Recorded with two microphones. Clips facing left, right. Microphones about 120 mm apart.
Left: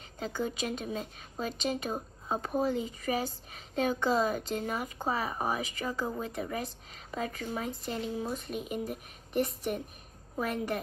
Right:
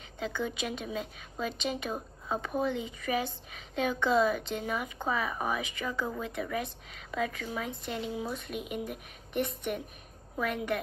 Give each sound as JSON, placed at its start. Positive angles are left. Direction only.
{"t": 0.2, "sound": "a woman's voice", "side_deg": 40}